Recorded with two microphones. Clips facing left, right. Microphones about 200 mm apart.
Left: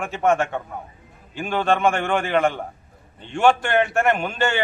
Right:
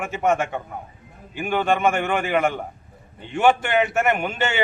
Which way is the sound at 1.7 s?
5° right (ahead or behind).